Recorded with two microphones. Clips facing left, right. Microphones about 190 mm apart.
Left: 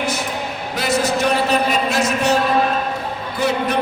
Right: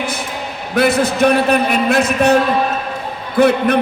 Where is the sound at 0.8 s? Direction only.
55° right (ahead or behind).